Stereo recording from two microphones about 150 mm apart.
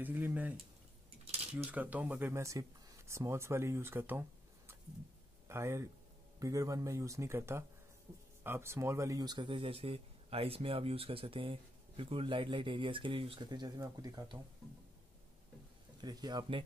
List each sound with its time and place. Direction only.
0.0 s a man's voice: 10° right (ahead or behind)
16.0 s speech: 25° right (ahead or behind)